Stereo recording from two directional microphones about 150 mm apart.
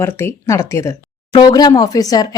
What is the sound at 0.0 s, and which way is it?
Speech, 15° left (ahead or behind).